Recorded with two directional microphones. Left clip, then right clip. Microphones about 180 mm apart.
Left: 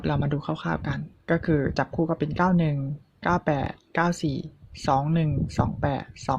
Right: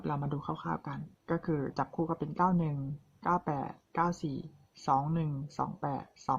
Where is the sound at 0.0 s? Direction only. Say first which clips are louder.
Left 8 dB; 25° left (ahead or behind).